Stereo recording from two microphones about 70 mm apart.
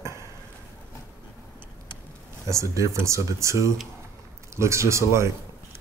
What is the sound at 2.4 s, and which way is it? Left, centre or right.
Speech, right.